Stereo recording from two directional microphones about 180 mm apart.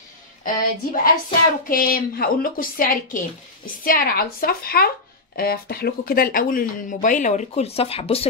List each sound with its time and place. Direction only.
0.4 s a woman's voice: 50° left (ahead or behind); by 8.3 s 35° left (ahead or behind)